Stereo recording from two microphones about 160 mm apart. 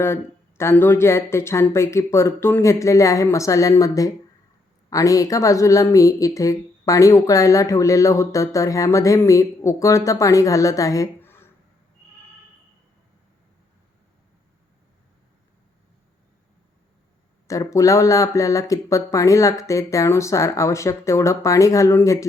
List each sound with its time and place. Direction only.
0.0 s speech: 15° left (ahead or behind)
17.5 s speech: 20° left (ahead or behind)